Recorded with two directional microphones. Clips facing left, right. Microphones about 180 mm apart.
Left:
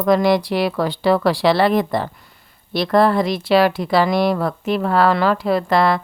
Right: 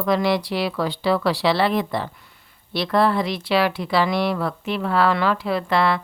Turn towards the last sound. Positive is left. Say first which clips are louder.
# left 4 dB
turn(degrees=40)  # may be behind; listen again after turning